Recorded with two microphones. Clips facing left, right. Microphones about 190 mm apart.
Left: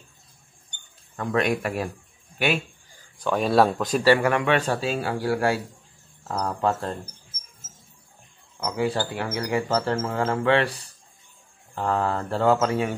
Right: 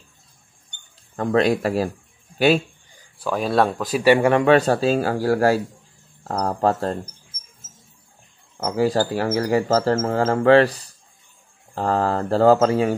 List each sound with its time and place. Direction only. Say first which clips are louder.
1.1 s speech: right 5 dB; 35° right (ahead or behind)
3.2 s speech: even; centre (ahead or behind)
4.0 s a man's voice: right 4 dB; 15° right (ahead or behind)
4.3 s speech: right 7 dB; 35° right (ahead or behind)
8.6 s speech: right 6 dB; 40° right (ahead or behind)
11.7 s speech: right 4 dB; 35° right (ahead or behind)